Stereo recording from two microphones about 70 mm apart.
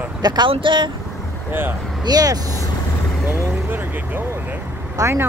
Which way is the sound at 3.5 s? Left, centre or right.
Right.